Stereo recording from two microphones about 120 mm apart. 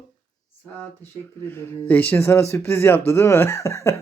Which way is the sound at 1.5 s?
15° left (ahead or behind).